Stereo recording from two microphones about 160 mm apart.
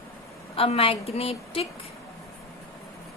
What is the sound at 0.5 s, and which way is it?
A woman's voice, 35° left (ahead or behind).